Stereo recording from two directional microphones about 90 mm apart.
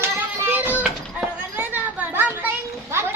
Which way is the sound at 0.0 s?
20° right (ahead or behind).